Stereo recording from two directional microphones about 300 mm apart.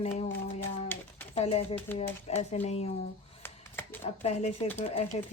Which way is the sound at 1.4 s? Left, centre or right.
Left.